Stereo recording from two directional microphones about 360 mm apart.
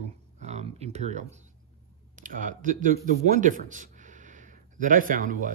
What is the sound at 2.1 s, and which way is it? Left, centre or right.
Speech, right.